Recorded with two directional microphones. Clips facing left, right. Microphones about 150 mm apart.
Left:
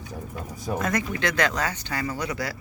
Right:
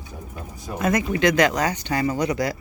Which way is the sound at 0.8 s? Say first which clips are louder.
Right 7 dB; 10° right (ahead or behind).